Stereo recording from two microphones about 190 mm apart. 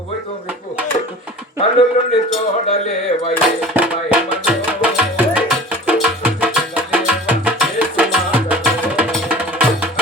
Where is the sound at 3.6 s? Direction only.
5° right (ahead or behind).